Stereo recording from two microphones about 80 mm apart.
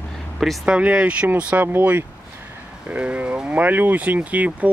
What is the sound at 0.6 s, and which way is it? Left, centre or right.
Speech, centre.